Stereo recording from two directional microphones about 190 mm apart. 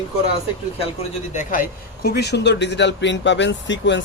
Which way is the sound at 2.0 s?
60° left (ahead or behind).